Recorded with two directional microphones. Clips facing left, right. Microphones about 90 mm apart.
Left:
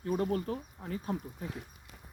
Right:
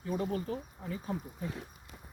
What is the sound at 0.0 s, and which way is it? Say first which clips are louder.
Speech: left 3 dB; 55° left (ahead or behind).